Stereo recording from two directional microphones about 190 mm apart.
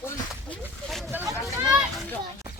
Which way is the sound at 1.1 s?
10° right (ahead or behind).